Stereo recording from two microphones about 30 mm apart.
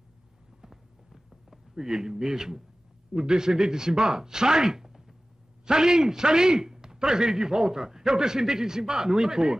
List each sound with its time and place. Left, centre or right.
0.6 s clip-clop: centre
1.8 s a man's voice: centre